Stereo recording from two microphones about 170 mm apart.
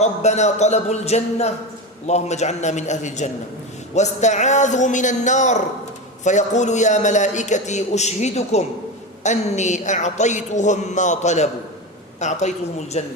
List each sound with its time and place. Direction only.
0.0 s a man's voice: 40° left (ahead or behind)